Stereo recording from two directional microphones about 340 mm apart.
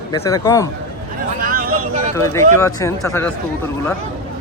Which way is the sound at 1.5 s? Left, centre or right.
Right.